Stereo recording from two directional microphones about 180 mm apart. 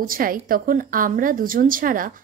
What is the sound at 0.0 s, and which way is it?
A woman's voice, 50° right (ahead or behind).